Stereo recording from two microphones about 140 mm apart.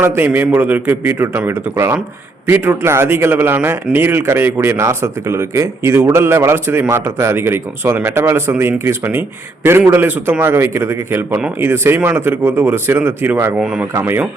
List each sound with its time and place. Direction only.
0.0 s a man's voice: 15° right (ahead or behind)
13.6 s a man's voice: 5° right (ahead or behind)